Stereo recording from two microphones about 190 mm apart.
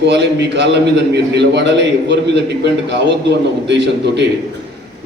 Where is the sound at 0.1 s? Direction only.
65° right (ahead or behind).